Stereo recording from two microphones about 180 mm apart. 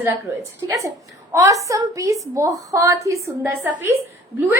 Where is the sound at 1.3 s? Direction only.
20° right (ahead or behind).